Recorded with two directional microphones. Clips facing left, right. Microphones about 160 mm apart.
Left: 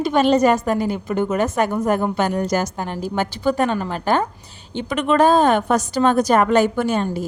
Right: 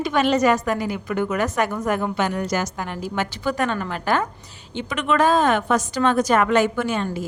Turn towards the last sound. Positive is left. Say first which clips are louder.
# left 3 dB
turn(degrees=40)  # may be behind; listen again after turning